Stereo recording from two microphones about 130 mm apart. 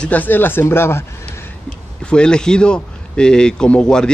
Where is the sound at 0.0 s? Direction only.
10° left (ahead or behind).